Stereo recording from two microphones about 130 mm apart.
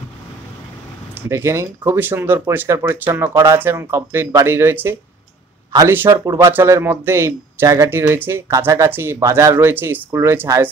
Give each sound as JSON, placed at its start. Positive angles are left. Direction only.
{"t": 1.3, "sound": "speech", "side_deg": -20}